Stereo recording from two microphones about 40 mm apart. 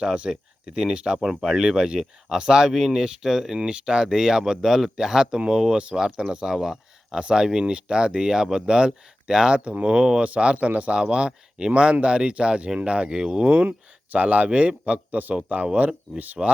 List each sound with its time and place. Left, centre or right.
0.0 s speech: right
1.2 s speech: centre
3.6 s a man's voice: right
10.9 s speech: right
13.4 s a man's voice: right